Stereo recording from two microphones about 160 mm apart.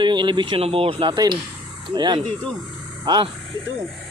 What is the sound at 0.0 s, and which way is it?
Speech, 30° right (ahead or behind).